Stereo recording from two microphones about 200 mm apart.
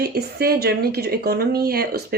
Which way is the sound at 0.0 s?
50° right (ahead or behind).